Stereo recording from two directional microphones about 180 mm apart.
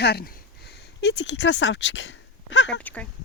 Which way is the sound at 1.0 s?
75° left (ahead or behind).